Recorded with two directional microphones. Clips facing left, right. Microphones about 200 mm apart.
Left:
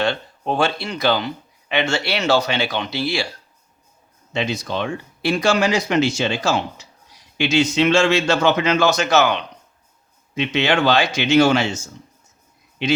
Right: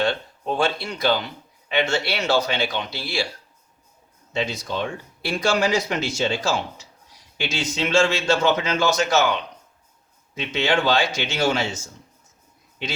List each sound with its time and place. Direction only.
0.0 s speech: 75° left (ahead or behind)
4.3 s speech: 70° left (ahead or behind)